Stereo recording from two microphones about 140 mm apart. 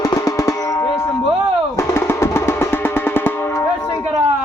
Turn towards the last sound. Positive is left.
turn(degrees=15)  # may be behind; listen again after turning